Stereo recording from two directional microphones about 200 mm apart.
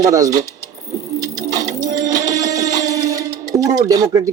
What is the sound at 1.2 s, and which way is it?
Music, 20° right (ahead or behind).